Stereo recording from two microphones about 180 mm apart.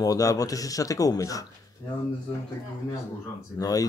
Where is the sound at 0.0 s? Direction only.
20° left (ahead or behind).